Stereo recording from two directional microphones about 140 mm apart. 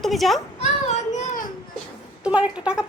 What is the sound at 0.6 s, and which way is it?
Child singing, 55° left (ahead or behind).